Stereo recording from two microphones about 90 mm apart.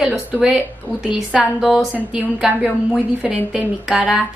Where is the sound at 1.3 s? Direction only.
5° right (ahead or behind).